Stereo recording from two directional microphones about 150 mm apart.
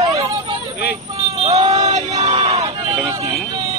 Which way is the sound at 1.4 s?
45° right (ahead or behind).